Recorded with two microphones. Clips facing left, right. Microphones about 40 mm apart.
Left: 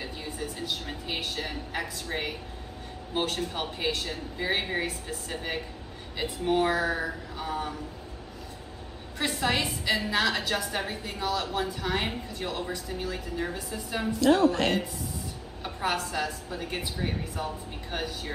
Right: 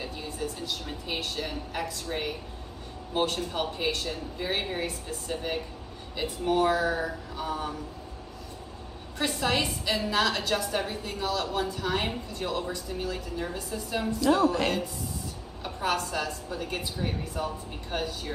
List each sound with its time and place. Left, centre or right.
0.0 s a woman's voice: centre
9.2 s a woman's voice: centre
14.2 s a woman's voice: left
15.6 s a woman's voice: centre